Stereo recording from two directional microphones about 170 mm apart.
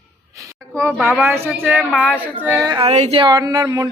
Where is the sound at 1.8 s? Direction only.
5° left (ahead or behind).